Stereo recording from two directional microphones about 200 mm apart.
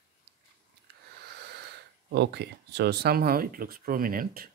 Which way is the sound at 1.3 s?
55° right (ahead or behind).